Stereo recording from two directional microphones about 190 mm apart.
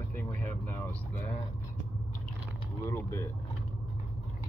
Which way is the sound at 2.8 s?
15° left (ahead or behind).